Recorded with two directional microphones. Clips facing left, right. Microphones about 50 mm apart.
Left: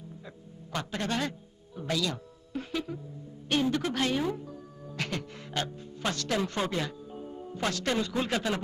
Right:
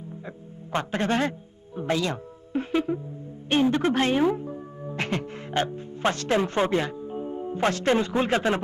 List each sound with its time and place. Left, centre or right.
0.3 s music: right
1.7 s speech: right